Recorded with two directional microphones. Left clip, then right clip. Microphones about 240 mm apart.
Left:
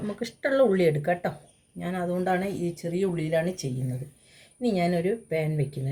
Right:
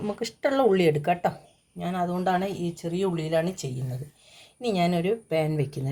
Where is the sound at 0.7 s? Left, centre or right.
Right.